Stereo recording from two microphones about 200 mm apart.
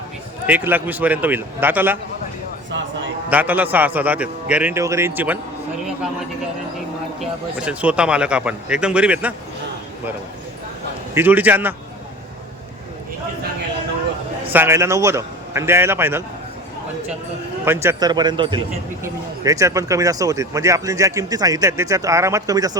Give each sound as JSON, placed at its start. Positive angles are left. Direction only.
{"t": 0.4, "sound": "speech", "side_deg": -10}
{"t": 2.6, "sound": "a sound", "side_deg": -65}
{"t": 3.2, "sound": "speech", "side_deg": -10}
{"t": 7.2, "sound": "a man's voice", "side_deg": -5}
{"t": 11.1, "sound": "speech", "side_deg": -10}
{"t": 14.5, "sound": "speech", "side_deg": -10}
{"t": 17.7, "sound": "speech", "side_deg": -15}